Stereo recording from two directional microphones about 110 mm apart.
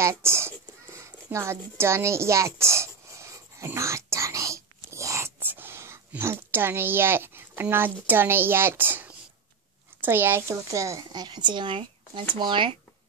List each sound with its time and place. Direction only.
0.0 s speech: 25° right (ahead or behind)
0.9 s a sound: 25° right (ahead or behind)
9.9 s speech: 20° right (ahead or behind); by 12.7 s 45° right (ahead or behind)